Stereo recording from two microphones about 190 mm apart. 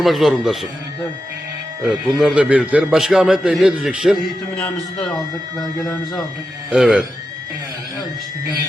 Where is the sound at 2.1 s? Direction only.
5° right (ahead or behind).